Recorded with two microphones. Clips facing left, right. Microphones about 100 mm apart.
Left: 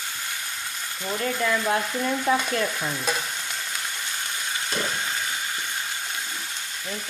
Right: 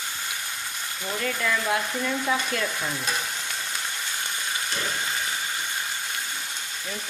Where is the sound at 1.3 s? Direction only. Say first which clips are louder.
Left 3 dB; 20° left (ahead or behind).